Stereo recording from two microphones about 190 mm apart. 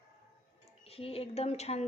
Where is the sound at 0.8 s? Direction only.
30° left (ahead or behind).